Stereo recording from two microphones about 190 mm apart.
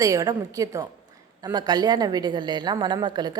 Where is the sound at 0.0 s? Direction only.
15° right (ahead or behind).